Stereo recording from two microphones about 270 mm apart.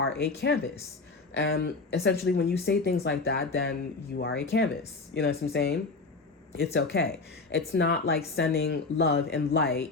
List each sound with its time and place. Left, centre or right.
0.0 s speech: left